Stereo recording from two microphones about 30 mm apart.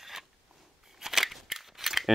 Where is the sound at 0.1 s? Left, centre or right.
Centre.